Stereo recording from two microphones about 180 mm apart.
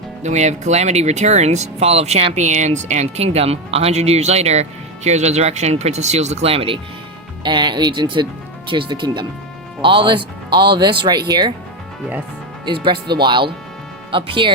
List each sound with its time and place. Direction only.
0.2 s speech: 40° right (ahead or behind); by 11.5 s 25° right (ahead or behind)
12.6 s speech: 25° right (ahead or behind)